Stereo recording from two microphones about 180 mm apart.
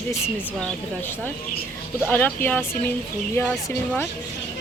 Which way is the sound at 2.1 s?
10° left (ahead or behind).